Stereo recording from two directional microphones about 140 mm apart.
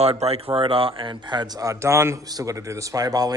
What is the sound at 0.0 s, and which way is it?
A man's voice, 45° right (ahead or behind).